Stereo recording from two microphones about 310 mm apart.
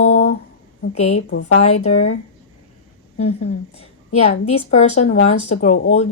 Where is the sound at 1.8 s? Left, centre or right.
Left.